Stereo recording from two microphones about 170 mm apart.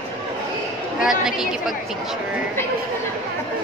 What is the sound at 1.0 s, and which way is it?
Speech, 5° right (ahead or behind).